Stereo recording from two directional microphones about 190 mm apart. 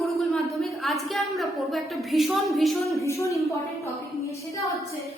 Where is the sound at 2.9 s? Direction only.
15° left (ahead or behind).